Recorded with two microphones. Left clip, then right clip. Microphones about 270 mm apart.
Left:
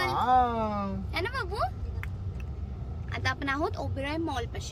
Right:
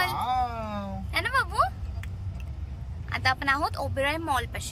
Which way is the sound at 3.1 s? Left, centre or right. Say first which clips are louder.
Right 6 dB; centre.